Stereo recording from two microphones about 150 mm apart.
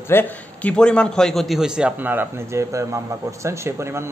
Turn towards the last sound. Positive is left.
turn(degrees=-20)  # may be behind; listen again after turning